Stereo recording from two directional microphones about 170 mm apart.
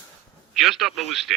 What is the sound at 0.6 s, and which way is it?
Speech, centre (ahead or behind).